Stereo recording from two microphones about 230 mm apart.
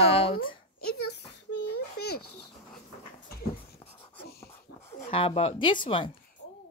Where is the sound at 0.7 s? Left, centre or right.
Left.